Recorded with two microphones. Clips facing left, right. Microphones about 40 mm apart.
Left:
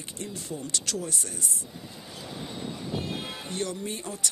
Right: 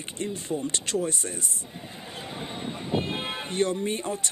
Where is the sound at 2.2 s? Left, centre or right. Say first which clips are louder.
Right 1 dB; right.